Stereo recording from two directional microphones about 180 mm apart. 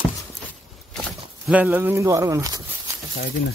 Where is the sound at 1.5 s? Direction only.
10° right (ahead or behind).